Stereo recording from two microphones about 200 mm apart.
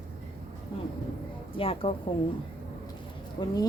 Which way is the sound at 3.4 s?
25° left (ahead or behind).